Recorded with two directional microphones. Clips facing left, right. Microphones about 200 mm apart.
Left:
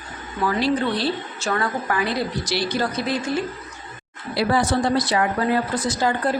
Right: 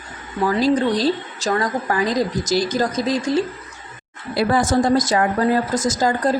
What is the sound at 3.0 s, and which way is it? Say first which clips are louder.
Speech: right 4 dB; 90° right.